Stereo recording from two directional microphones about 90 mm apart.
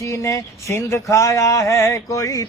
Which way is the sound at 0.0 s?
35° left (ahead or behind).